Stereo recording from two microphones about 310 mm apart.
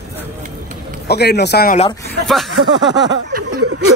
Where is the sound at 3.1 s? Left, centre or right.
Right.